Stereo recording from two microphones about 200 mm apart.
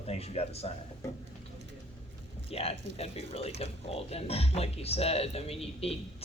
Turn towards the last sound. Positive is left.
turn(degrees=30)  # may be behind; listen again after turning